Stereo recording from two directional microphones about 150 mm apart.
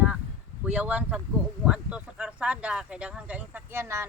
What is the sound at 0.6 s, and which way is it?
Speech, 10° right (ahead or behind).